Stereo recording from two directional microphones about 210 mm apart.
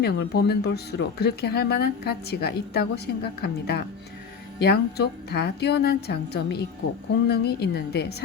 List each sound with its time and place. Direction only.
0.0 s speech: 50° left (ahead or behind)